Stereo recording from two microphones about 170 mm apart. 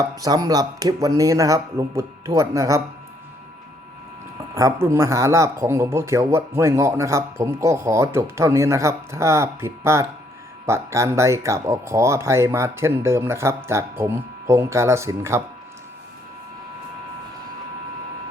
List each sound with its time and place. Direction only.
0.0 s speech: 20° right (ahead or behind)
4.5 s speech: 15° right (ahead or behind)